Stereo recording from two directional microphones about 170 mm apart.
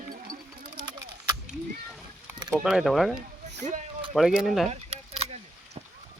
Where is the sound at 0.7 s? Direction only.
25° right (ahead or behind).